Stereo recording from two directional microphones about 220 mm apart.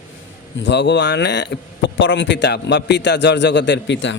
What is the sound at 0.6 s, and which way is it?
A man's voice, 50° left (ahead or behind).